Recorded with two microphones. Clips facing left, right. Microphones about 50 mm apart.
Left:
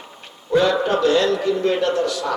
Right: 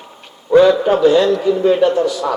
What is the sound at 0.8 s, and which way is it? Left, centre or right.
A man's voice, centre.